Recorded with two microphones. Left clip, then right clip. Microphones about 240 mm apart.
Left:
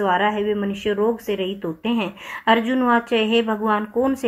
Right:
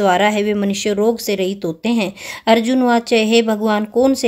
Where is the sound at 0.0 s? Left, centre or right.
Right.